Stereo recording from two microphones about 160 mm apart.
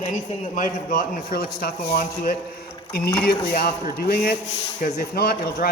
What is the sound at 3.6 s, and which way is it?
A man's voice, 75° left (ahead or behind).